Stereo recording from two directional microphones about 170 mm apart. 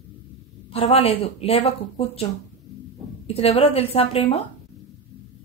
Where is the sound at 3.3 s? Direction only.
35° left (ahead or behind).